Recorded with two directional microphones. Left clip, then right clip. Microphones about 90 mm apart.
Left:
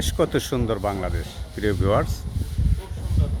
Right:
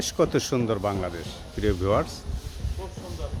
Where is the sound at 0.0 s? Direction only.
20° left (ahead or behind).